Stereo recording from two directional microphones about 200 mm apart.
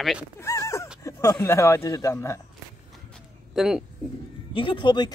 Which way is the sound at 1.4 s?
15° left (ahead or behind).